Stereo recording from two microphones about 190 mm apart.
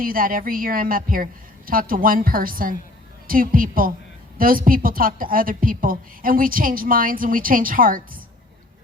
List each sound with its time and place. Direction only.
0.0 s a woman's voice: 50° right (ahead or behind)